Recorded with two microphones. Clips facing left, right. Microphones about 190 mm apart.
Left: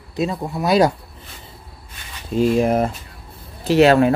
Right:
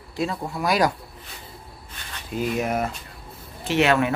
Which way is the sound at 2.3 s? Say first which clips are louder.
Left 8 dB; 30° left (ahead or behind).